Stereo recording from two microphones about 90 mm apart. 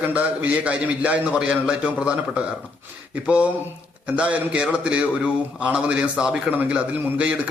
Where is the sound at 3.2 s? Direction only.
15° right (ahead or behind).